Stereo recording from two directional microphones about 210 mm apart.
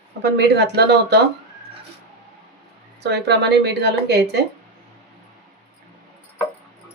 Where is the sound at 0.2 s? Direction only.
50° right (ahead or behind).